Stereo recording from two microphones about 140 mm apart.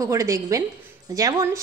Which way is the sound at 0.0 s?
20° right (ahead or behind).